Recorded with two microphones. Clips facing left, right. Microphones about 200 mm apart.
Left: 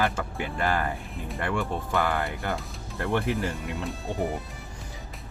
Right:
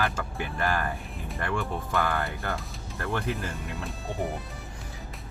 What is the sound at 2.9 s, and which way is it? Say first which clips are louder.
Speech: left 4 dB; 20° left (ahead or behind).